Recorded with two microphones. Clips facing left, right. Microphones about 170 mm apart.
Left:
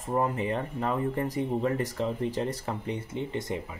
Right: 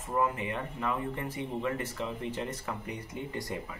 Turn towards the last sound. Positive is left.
turn(degrees=20)  # may be behind; listen again after turning